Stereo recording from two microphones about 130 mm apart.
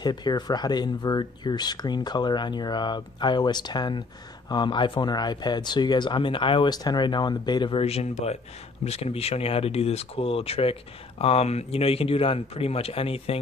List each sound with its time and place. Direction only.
0.0 s speech: 35° left (ahead or behind)
7.8 s speech: 55° left (ahead or behind)